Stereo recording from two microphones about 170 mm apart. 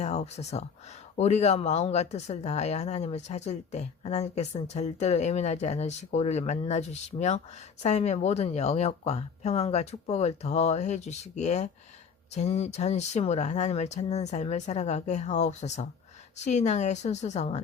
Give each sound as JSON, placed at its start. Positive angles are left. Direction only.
{"t": 0.0, "sound": "a woman's voice", "side_deg": 40}